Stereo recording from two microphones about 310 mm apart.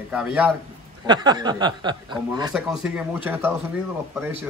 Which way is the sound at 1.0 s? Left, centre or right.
Centre.